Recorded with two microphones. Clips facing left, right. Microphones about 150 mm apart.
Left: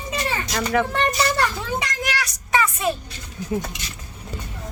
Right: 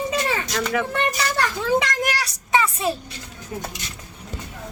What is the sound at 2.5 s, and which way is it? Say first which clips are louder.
Music: even; 30° right (ahead or behind).